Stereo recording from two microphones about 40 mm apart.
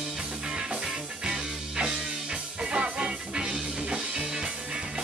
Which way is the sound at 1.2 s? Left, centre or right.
Right.